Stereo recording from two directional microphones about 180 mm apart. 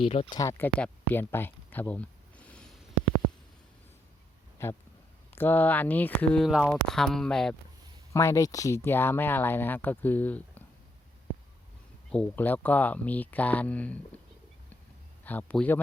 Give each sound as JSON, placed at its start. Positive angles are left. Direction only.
{"t": 0.1, "sound": "speech", "side_deg": 30}
{"t": 0.3, "sound": "speech", "side_deg": 15}
{"t": 4.6, "sound": "speech", "side_deg": 15}
{"t": 8.1, "sound": "speech", "side_deg": 15}
{"t": 12.1, "sound": "speech", "side_deg": 10}
{"t": 15.2, "sound": "speech", "side_deg": 10}